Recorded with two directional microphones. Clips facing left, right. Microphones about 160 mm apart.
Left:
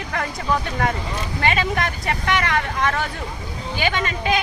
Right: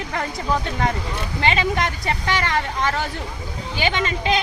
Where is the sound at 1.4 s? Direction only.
20° right (ahead or behind).